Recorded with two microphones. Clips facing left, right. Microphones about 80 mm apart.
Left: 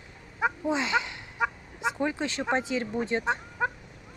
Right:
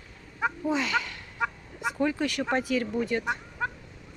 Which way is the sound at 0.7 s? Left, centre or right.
Left.